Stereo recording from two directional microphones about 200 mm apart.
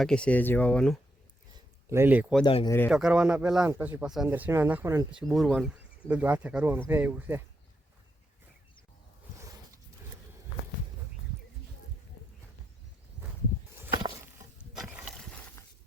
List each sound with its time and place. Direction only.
0.0 s speech: 5° left (ahead or behind)
1.5 s a sound: 15° right (ahead or behind)
2.4 s speech: 25° left (ahead or behind)
2.6 s speech: 10° left (ahead or behind)
2.9 s speech: 5° right (ahead or behind)
5.1 s speech: centre (ahead or behind)
14.7 s a sound: centre (ahead or behind)